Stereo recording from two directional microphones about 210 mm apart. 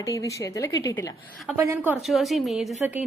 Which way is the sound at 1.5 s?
10° right (ahead or behind).